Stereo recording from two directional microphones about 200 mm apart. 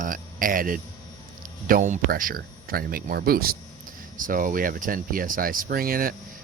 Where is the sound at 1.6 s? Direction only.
40° right (ahead or behind).